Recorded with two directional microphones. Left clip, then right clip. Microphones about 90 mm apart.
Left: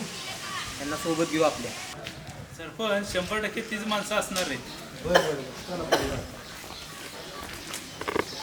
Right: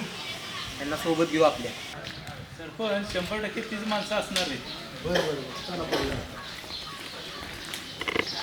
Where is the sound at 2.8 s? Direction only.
20° left (ahead or behind).